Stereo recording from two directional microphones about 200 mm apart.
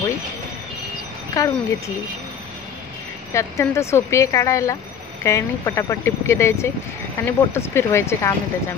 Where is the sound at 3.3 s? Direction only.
15° left (ahead or behind).